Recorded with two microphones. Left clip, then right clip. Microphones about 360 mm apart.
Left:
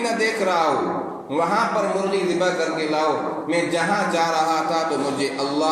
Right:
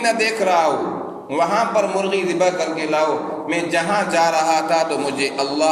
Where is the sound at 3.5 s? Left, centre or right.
Right.